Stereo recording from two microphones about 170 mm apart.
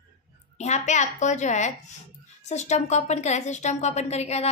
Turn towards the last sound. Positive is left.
turn(degrees=40)  # may be behind; listen again after turning